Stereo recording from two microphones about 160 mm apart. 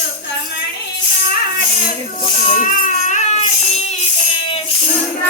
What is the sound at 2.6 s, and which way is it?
Baby cry, 50° left (ahead or behind).